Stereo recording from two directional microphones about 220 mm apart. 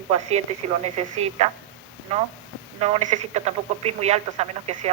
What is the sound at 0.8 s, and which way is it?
Speech, 30° right (ahead or behind).